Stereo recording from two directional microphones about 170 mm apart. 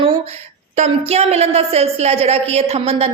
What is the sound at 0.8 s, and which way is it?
A woman's voice, 40° right (ahead or behind).